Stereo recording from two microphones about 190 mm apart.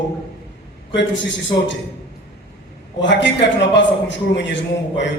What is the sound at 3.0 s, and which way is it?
A man's voice, 70° left (ahead or behind).